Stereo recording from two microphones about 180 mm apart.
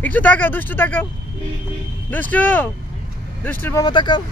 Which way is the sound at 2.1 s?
10° left (ahead or behind).